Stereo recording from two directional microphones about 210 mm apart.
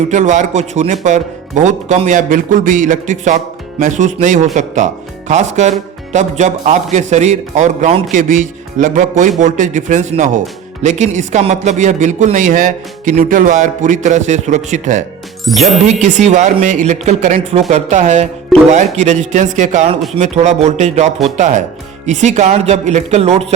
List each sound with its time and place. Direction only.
0.1 s speech: 35° right (ahead or behind)
15.5 s speech: centre (ahead or behind)
16.0 s speech: 35° right (ahead or behind)
18.5 s speech: centre (ahead or behind)
18.9 s speech: 35° right (ahead or behind)